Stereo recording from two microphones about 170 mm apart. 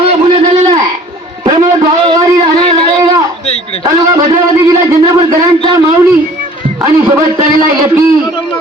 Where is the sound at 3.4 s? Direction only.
35° left (ahead or behind).